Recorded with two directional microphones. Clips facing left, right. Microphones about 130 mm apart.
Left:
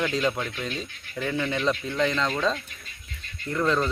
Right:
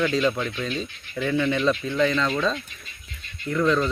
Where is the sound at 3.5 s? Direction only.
5° left (ahead or behind).